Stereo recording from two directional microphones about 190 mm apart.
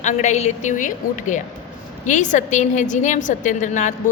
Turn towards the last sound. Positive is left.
turn(degrees=40)  # may be behind; listen again after turning